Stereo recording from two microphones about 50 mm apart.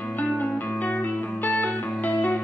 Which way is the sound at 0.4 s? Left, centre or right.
Left.